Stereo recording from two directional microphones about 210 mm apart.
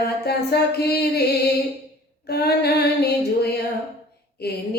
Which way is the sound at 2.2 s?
50° left (ahead or behind).